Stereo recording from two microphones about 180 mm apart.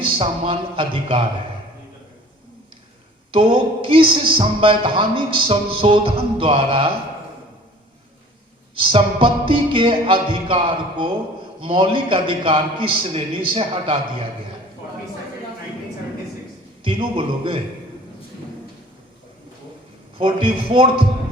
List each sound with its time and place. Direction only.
0.0 s speech: 30° right (ahead or behind)
3.3 s speech: 30° right (ahead or behind)
8.8 s speech: 30° right (ahead or behind)
16.8 s speech: 30° right (ahead or behind)
20.1 s speech: 30° right (ahead or behind)